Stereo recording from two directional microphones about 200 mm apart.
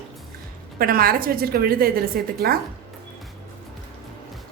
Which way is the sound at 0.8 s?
45° right (ahead or behind).